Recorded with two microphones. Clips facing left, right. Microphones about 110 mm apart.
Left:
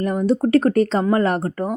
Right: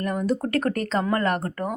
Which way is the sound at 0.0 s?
25° left (ahead or behind).